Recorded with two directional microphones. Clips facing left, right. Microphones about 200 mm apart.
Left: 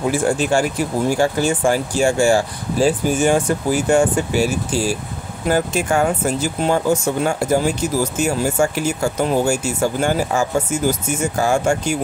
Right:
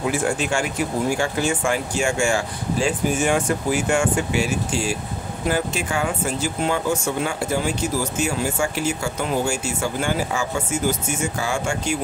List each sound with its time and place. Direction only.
0.1 s speech: 35° left (ahead or behind)